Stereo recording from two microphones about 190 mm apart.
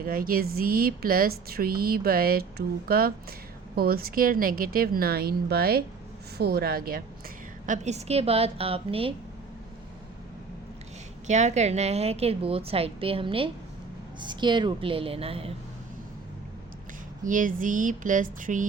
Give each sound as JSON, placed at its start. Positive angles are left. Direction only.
{"t": 0.0, "sound": "speech", "side_deg": -50}
{"t": 7.7, "sound": "a woman's voice", "side_deg": -35}
{"t": 11.3, "sound": "a woman's voice", "side_deg": -35}
{"t": 17.2, "sound": "speech", "side_deg": -45}